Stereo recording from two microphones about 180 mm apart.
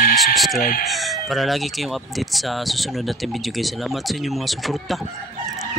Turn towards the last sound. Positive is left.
turn(degrees=0)  # may be behind; listen again after turning